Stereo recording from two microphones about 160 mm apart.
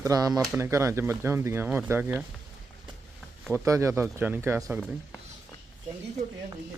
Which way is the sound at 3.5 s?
20° right (ahead or behind).